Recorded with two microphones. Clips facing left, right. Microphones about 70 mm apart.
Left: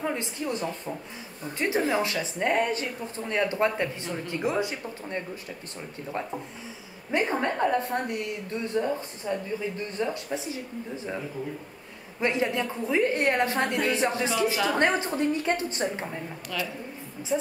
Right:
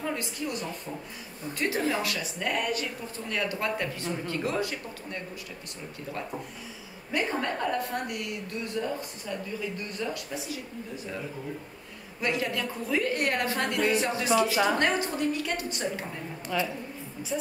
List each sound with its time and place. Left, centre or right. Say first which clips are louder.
0.0 s a woman's voice: left 2 dB; left
7.1 s a woman's voice: left 3 dB; left
12.2 s a woman's voice: left 3 dB; left
16.5 s speech: right 3 dB; centre
17.3 s a woman's voice: left 5 dB; left